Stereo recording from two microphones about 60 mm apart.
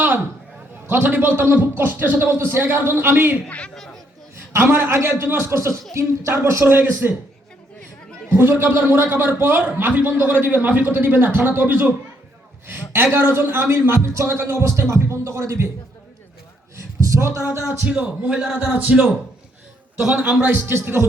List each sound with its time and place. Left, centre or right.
0.9 s a man's voice: right
4.5 s a man's voice: right
5.9 s speech: right
6.7 s a man's voice: right
8.3 s a man's voice: right
13.1 s a man's voice: right
16.7 s a sound: right
17.8 s a man's voice: centre
20.2 s a man's voice: right
20.7 s speech: right